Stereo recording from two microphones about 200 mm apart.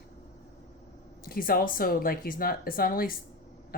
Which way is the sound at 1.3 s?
45° left (ahead or behind).